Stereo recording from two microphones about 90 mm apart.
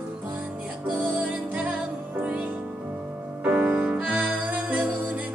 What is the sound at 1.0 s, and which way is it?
Music, 20° right (ahead or behind).